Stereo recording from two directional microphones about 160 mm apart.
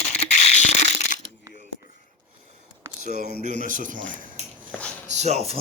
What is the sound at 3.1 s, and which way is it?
Speech, 70° left (ahead or behind).